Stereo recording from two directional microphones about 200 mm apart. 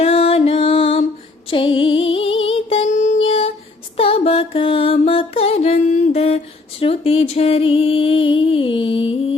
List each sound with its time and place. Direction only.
0.0 s music: 30° left (ahead or behind)